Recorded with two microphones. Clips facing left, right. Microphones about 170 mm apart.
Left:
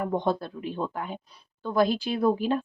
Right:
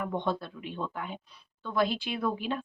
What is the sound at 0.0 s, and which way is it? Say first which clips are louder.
Speech: left 5 dB; 40° left (ahead or behind).